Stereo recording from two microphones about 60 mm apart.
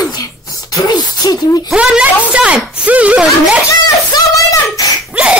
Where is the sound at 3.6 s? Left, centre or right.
Left.